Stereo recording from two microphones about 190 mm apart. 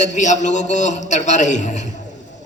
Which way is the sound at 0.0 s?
40° left (ahead or behind).